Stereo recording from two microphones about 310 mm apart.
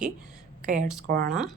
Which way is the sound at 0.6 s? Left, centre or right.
Right.